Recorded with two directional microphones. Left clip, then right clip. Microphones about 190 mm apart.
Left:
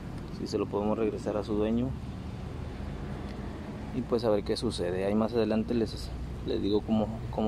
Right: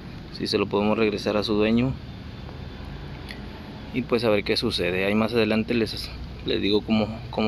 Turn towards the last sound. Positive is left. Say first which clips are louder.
# right 5 dB
turn(degrees=-10)  # may be behind; listen again after turning